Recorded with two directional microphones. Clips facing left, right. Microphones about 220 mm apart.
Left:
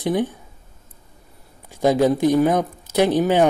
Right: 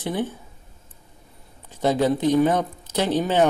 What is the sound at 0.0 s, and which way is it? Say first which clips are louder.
Speech: left 5 dB; 15° left (ahead or behind).